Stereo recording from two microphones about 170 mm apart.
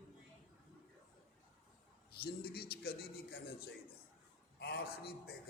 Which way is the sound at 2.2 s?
65° left (ahead or behind).